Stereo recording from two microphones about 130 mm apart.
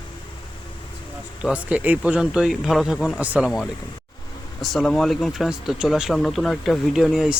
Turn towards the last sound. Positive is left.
turn(degrees=-5)  # may be behind; listen again after turning